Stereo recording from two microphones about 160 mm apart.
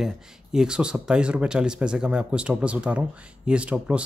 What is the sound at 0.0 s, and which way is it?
Speech, 5° right (ahead or behind).